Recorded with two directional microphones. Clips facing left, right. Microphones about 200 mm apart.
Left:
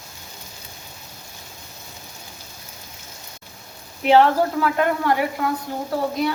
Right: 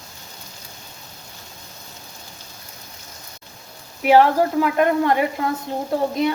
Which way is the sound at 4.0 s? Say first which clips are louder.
Right 1 dB; 10° right (ahead or behind).